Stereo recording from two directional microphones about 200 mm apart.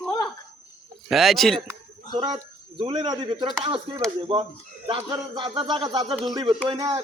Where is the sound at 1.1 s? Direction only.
Centre (ahead or behind).